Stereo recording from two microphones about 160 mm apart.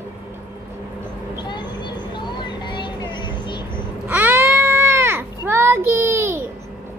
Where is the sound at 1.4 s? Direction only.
30° left (ahead or behind).